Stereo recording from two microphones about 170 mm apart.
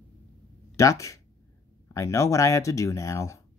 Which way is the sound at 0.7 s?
20° left (ahead or behind).